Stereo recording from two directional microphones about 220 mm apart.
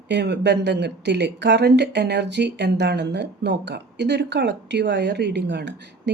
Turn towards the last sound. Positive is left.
turn(degrees=-50)  # may be behind; listen again after turning